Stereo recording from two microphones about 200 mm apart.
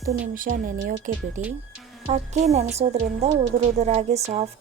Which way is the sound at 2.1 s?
35° right (ahead or behind).